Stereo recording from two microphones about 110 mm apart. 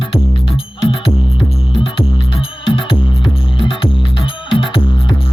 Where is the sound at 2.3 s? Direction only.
50° left (ahead or behind).